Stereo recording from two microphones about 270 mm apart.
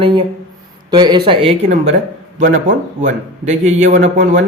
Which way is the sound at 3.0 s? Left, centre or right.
Right.